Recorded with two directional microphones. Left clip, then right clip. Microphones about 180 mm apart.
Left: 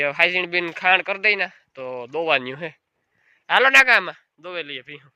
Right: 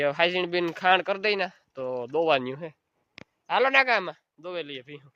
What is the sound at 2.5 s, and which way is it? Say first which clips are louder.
Speech: left 6 dB; 5° left (ahead or behind).